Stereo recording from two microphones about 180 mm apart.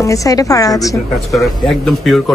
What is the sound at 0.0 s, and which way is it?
Speech, 20° left (ahead or behind).